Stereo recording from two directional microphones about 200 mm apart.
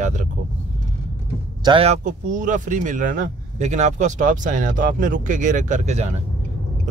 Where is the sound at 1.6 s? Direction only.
25° right (ahead or behind).